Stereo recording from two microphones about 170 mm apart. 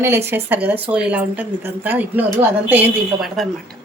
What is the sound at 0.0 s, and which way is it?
A woman's voice, 15° right (ahead or behind).